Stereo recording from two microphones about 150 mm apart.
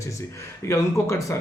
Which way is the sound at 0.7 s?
20° left (ahead or behind).